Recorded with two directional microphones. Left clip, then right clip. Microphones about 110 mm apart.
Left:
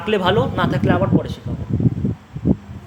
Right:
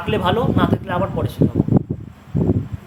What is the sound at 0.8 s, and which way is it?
Speech, 25° left (ahead or behind).